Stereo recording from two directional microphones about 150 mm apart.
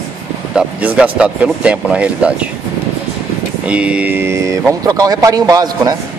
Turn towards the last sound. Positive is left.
turn(degrees=-25)  # may be behind; listen again after turning